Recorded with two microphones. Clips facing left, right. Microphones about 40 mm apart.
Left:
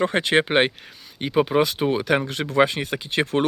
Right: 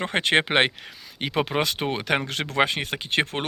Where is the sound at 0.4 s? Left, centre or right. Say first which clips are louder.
Left 2 dB; right.